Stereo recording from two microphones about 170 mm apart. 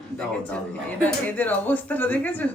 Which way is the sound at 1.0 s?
10° left (ahead or behind).